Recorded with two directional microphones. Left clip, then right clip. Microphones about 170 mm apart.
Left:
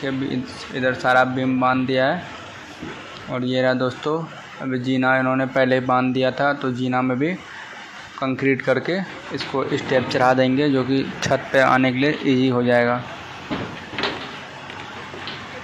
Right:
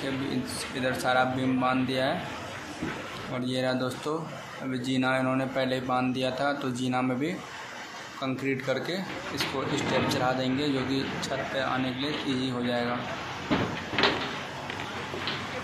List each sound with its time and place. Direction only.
1.0 s speech: 20° left (ahead or behind)
3.3 s speech: 20° left (ahead or behind)
9.3 s speech: centre (ahead or behind)
10.2 s speech: 35° left (ahead or behind)
10.5 s speech: centre (ahead or behind)
11.1 s speech: 35° left (ahead or behind)
13.5 s cupboard open or close: centre (ahead or behind)